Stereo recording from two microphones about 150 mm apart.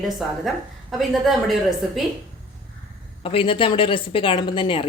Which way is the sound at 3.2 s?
35° left (ahead or behind).